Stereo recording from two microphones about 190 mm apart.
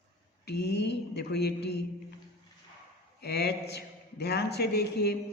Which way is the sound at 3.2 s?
60° left (ahead or behind).